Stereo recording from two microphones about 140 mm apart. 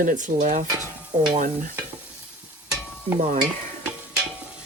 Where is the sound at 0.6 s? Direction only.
30° right (ahead or behind).